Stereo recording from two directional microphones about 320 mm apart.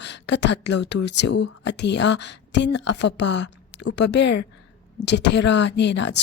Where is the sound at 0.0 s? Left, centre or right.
Left.